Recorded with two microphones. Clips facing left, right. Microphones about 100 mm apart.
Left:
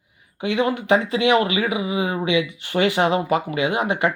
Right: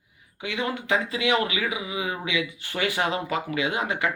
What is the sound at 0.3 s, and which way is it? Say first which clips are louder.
Speech: left 8 dB; 25° left (ahead or behind).